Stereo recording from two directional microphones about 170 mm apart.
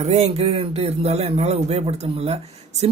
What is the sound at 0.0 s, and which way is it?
A man's voice, 40° right (ahead or behind).